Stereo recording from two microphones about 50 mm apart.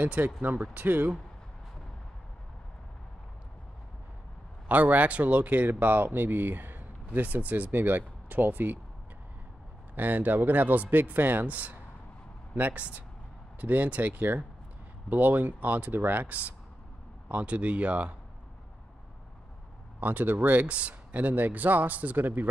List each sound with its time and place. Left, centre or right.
0.0 s speech: right
4.6 s speech: right
9.9 s speech: right
20.0 s speech: right